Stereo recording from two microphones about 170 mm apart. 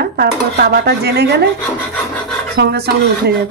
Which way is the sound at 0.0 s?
70° right (ahead or behind).